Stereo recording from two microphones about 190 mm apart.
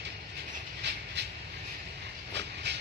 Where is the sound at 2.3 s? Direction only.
65° right (ahead or behind).